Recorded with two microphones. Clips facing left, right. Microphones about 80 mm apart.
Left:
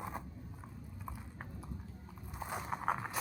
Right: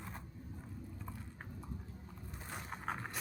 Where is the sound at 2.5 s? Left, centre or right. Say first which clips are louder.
Left 6 dB; centre.